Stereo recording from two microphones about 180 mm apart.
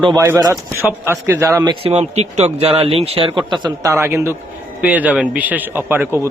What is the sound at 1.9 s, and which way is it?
Speech, 35° right (ahead or behind).